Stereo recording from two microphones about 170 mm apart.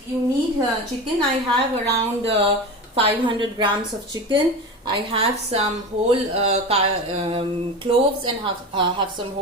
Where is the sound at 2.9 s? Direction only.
30° right (ahead or behind).